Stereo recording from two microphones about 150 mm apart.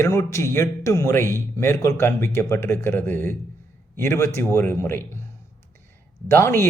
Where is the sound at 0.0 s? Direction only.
20° left (ahead or behind).